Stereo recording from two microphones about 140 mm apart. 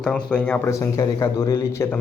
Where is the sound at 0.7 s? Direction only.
25° left (ahead or behind).